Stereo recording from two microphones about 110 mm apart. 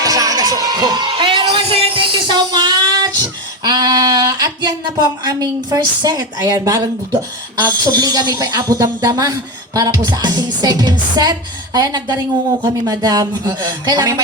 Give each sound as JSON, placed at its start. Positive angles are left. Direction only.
{"t": 0.0, "sound": "speech", "side_deg": -35}